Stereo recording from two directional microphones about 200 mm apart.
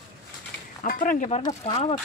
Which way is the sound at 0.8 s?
45° left (ahead or behind).